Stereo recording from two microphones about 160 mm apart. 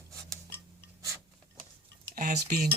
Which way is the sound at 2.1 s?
60° right (ahead or behind).